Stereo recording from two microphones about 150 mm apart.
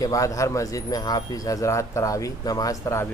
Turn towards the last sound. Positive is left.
turn(degrees=20)  # may be behind; listen again after turning